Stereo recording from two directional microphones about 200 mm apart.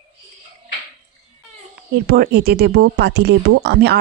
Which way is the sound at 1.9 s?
50° right (ahead or behind).